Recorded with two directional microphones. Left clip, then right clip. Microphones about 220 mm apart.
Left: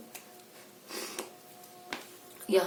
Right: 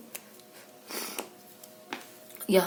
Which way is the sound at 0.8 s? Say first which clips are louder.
Right 2 dB; 50° right (ahead or behind).